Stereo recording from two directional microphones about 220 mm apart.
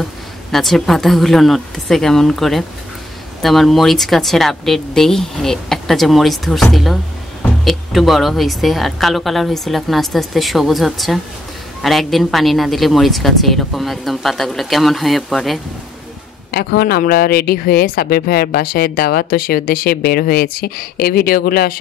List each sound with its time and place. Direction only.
0.0 s a woman's voice: centre (ahead or behind)
16.5 s speech: 45° left (ahead or behind)